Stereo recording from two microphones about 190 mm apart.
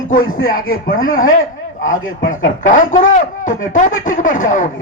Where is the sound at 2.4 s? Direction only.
45° left (ahead or behind).